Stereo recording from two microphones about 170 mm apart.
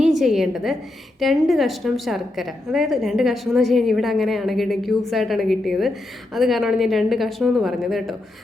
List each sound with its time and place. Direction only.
0.0 s a woman's voice: centre (ahead or behind)